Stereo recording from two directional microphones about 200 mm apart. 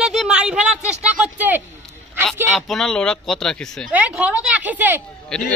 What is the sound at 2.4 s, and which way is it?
Speech, centre (ahead or behind).